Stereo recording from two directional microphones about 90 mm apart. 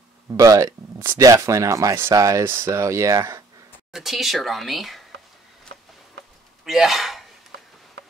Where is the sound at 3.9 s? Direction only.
5° right (ahead or behind).